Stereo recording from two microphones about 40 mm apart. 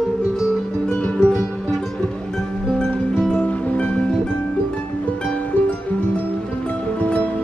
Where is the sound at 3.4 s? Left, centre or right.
Left.